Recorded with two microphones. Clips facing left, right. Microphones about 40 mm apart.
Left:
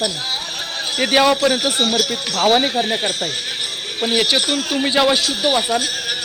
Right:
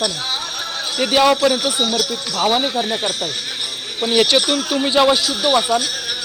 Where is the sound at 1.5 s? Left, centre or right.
Left.